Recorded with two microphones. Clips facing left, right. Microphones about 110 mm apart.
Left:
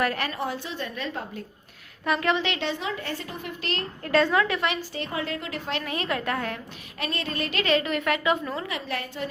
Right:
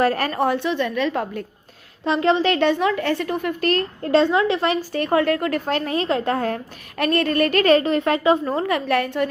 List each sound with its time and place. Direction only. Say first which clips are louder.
0.0 s a woman's voice: right 8 dB; 40° right (ahead or behind); by 1.5 s 70° right (ahead or behind)
2.0 s a woman's voice: right 7 dB; 30° right (ahead or behind); by 3.8 s 50° right (ahead or behind)
4.0 s a woman's voice: right 4 dB; 25° right (ahead or behind)
7.0 s a woman's voice: right 12 dB; 55° right (ahead or behind)